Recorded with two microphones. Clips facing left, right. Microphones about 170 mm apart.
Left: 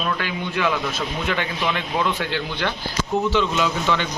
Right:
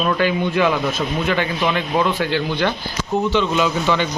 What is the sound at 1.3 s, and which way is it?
Speech, centre (ahead or behind).